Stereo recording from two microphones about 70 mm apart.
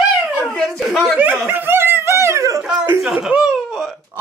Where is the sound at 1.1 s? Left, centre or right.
Right.